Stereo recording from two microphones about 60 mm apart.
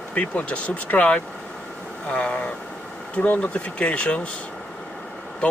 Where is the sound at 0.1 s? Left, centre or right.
Left.